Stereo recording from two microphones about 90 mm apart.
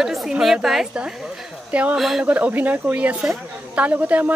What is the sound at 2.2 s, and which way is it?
Speech, 15° right (ahead or behind).